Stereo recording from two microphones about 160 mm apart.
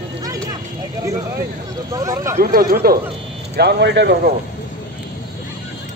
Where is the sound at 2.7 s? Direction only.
70° right (ahead or behind).